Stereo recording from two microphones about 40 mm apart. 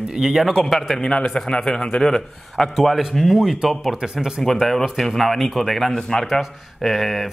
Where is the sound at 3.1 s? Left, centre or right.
Centre.